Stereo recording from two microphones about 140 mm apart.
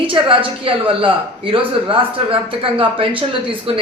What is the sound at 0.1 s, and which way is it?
A man's voice, 40° right (ahead or behind).